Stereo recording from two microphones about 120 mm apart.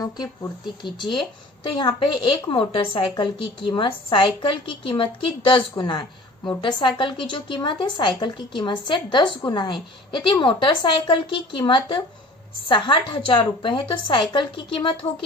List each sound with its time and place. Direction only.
0.0 s a woman's voice: 30° left (ahead or behind)